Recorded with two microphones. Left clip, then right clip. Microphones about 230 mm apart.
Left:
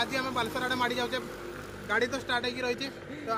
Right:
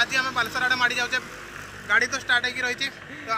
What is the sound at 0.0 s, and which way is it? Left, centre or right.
Speech, centre.